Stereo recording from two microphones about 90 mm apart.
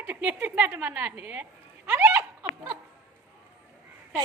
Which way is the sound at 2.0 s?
20° right (ahead or behind).